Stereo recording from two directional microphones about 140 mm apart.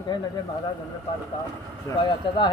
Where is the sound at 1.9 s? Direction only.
35° left (ahead or behind).